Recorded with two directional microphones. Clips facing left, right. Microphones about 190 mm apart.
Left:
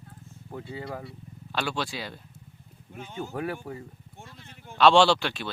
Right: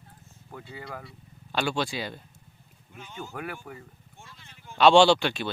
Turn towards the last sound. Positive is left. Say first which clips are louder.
# right 2 dB
turn(degrees=0)  # may be behind; listen again after turning